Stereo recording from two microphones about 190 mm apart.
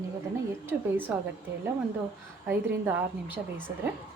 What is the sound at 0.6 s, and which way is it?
Speech, 10° right (ahead or behind).